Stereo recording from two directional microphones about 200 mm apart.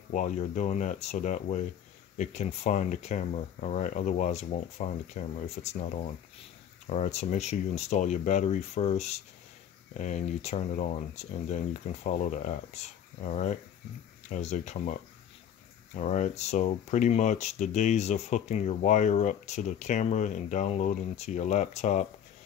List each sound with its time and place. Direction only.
0.1 s speech: 35° left (ahead or behind)